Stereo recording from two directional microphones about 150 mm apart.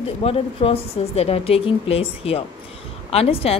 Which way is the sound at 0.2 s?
40° left (ahead or behind).